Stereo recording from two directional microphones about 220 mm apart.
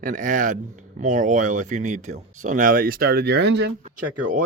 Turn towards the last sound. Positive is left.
turn(degrees=-50)  # may be behind; listen again after turning